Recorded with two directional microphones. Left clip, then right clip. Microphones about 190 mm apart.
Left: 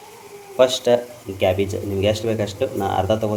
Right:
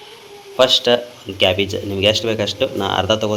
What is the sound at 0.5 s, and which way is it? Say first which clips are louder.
Speech: right 3 dB; 5° left (ahead or behind).